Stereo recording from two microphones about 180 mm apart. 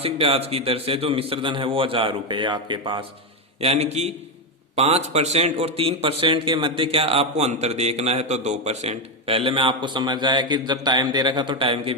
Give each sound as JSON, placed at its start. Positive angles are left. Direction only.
{"t": 0.0, "sound": "a man's voice", "side_deg": -35}
{"t": 3.6, "sound": "speech", "side_deg": -35}